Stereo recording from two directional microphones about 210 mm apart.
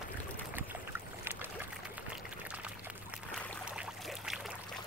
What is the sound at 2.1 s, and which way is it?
Pour, 5° right (ahead or behind).